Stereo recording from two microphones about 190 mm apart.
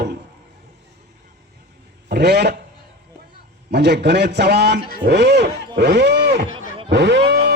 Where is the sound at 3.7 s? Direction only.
60° right (ahead or behind).